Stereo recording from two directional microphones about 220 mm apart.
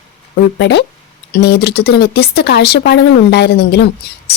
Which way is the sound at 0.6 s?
50° left (ahead or behind).